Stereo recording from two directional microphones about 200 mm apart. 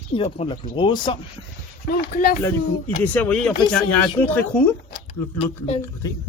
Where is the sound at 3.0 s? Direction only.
10° left (ahead or behind).